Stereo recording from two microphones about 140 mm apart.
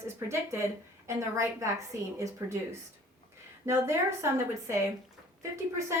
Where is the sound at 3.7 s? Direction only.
20° right (ahead or behind).